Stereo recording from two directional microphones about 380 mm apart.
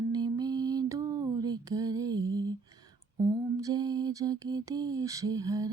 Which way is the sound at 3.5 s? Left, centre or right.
Centre.